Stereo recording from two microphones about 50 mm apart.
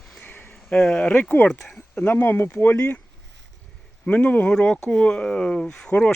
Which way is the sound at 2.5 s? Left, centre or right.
Left.